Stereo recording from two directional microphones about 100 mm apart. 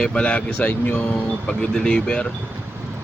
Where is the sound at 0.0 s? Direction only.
10° left (ahead or behind).